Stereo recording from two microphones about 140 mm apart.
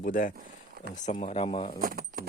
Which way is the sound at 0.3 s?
90° right.